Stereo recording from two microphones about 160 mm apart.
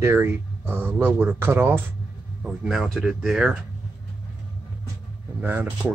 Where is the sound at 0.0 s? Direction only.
15° right (ahead or behind).